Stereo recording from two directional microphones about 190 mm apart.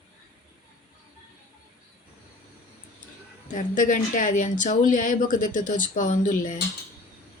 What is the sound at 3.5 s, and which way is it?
Speech, 45° left (ahead or behind).